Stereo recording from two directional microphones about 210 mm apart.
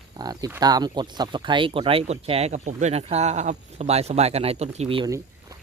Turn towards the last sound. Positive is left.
turn(degrees=-25)  # may be behind; listen again after turning